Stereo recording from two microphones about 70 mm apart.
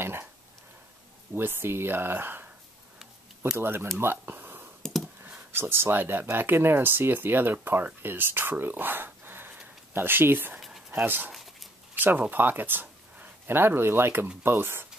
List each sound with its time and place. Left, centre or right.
0.0 s a sound: right
1.3 s speech: right
3.5 s speech: right
4.0 s a sound: right
5.5 s speech: right
11.3 s dog: centre
11.9 s speech: right